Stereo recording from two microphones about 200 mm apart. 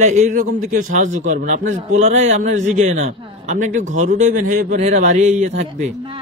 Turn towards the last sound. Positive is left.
turn(degrees=-30)  # may be behind; listen again after turning